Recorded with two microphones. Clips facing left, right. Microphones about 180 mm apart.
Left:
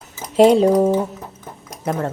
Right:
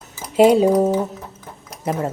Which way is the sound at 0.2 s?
5° right (ahead or behind).